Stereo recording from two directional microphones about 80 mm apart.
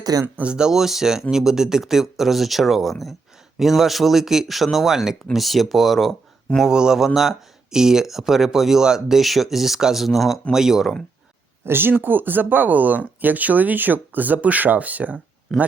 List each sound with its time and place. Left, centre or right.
0.0 s speech: right
0.3 s speech: centre
6.6 s speech: centre
11.6 s speech: right